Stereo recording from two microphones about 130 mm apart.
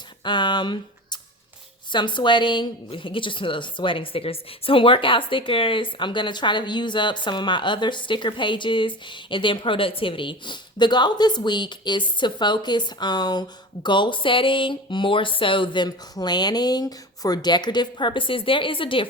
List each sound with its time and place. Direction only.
0.3 s a woman's voice: 35° left (ahead or behind)